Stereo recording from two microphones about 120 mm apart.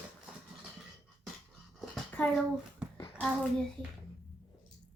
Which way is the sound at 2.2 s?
10° left (ahead or behind).